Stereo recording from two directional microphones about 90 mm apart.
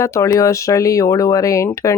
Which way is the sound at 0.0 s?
35° left (ahead or behind).